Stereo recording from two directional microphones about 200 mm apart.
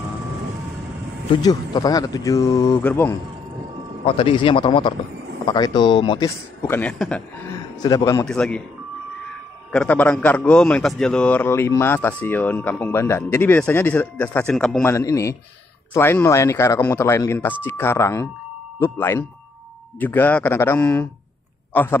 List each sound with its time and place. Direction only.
1.3 s a man's voice: 20° left (ahead or behind)
4.0 s a man's voice: 25° left (ahead or behind); by 7.5 s 5° left (ahead or behind)
7.8 s a man's voice: 20° left (ahead or behind)
8.3 s speech: 5° left (ahead or behind)
9.7 s a man's voice: 5° left (ahead or behind)